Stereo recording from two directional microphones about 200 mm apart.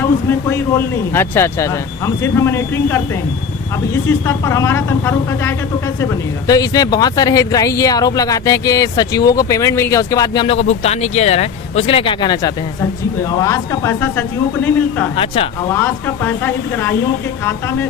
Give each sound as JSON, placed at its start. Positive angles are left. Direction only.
{"t": 0.0, "sound": "speech", "side_deg": 10}
{"t": 4.3, "sound": "speech", "side_deg": 15}
{"t": 15.1, "sound": "speech", "side_deg": 25}
{"t": 15.7, "sound": "speech", "side_deg": 10}